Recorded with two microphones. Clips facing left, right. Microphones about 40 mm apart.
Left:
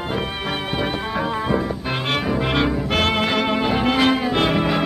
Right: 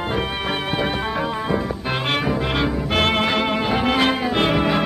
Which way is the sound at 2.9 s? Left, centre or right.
Right.